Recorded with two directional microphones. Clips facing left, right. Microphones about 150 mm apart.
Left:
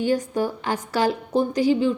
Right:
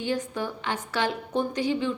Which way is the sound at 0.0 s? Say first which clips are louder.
Left 7 dB; 40° left (ahead or behind).